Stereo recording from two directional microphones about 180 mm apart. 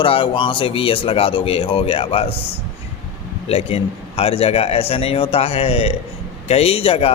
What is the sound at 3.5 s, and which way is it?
Speech, 35° left (ahead or behind).